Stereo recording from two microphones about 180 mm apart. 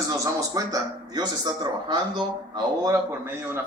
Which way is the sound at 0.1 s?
20° right (ahead or behind).